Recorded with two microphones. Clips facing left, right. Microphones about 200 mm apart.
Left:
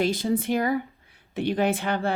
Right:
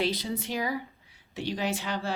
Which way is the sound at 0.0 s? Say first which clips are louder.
Left 6 dB; 50° left (ahead or behind).